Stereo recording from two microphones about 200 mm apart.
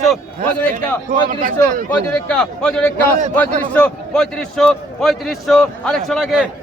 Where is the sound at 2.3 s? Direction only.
5° left (ahead or behind).